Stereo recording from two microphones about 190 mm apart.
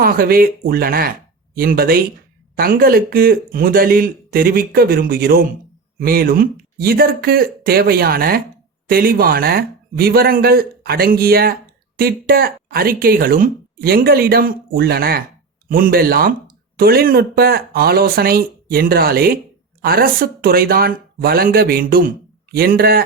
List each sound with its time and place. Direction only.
0.0 s speech: 50° right (ahead or behind)